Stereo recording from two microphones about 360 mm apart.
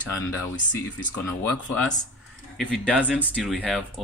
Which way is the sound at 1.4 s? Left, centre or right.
Centre.